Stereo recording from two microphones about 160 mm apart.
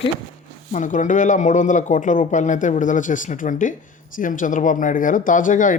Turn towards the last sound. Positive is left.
turn(degrees=55)  # may be behind; listen again after turning